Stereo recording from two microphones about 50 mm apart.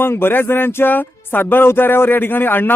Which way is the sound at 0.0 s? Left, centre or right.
Left.